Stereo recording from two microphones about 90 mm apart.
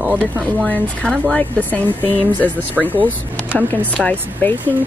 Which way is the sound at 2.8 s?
Centre (ahead or behind).